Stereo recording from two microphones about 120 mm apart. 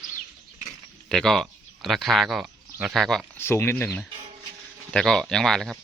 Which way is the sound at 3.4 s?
20° left (ahead or behind).